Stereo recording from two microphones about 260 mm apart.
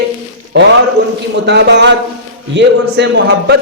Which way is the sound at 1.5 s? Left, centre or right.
Right.